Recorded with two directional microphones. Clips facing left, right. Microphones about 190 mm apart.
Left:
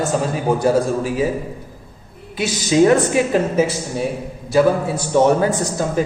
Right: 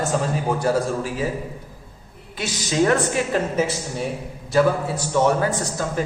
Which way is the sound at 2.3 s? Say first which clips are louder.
Left 7 dB; 10° left (ahead or behind).